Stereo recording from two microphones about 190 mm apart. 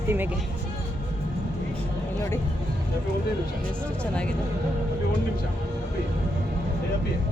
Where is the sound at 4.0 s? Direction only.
5° left (ahead or behind).